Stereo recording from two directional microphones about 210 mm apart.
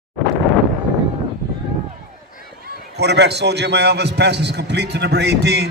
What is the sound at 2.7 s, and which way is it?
A man's voice, 55° right (ahead or behind).